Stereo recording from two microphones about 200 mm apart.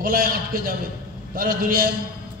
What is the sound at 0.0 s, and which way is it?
A man's voice, 45° right (ahead or behind).